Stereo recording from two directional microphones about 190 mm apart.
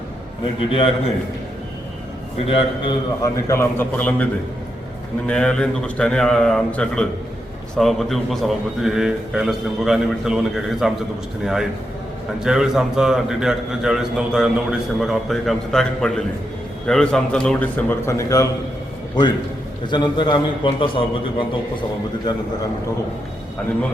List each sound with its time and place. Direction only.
0.7 s a man's voice: 30° left (ahead or behind)
2.5 s a man's voice: 30° left (ahead or behind)
3.2 s a man's voice: 15° left (ahead or behind); by 10.9 s centre (ahead or behind)
12.4 s a man's voice: 5° right (ahead or behind); by 18.4 s 15° left (ahead or behind)
19.9 s a man's voice: 25° left (ahead or behind)